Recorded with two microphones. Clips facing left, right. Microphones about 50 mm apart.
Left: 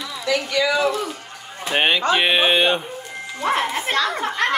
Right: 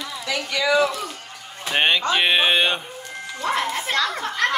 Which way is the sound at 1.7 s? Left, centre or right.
Centre.